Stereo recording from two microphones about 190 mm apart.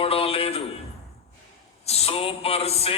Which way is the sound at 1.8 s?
30° left (ahead or behind).